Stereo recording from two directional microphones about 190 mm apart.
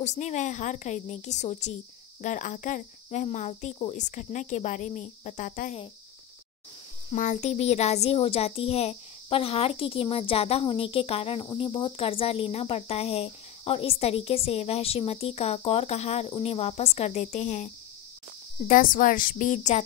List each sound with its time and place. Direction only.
0.0 s speech: 35° left (ahead or behind)
7.1 s speech: 40° left (ahead or behind)
18.7 s a woman's voice: 45° left (ahead or behind)